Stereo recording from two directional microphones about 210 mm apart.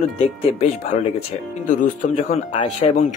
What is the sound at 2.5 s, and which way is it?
Speech, 30° left (ahead or behind).